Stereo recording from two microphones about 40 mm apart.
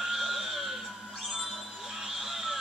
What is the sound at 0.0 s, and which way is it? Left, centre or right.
Music, centre.